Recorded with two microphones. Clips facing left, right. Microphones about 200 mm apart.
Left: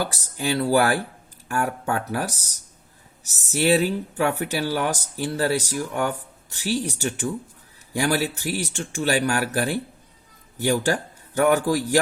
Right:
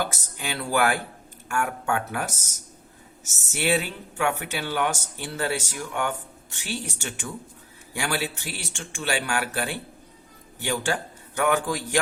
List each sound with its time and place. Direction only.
0.0 s speech: 35° left (ahead or behind)
7.9 s a man's voice: 40° left (ahead or behind)